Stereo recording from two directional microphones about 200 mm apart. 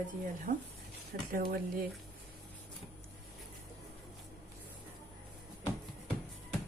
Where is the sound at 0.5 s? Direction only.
45° right (ahead or behind).